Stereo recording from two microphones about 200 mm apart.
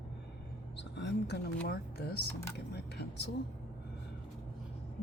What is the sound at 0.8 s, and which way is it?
Speech, 60° left (ahead or behind).